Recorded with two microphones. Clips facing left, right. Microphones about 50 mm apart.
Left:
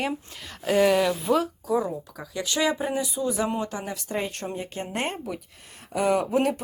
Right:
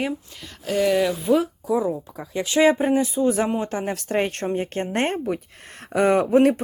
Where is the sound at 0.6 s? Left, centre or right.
Centre.